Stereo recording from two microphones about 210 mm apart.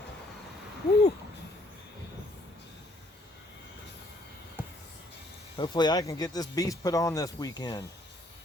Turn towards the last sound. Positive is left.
turn(degrees=20)  # may be behind; listen again after turning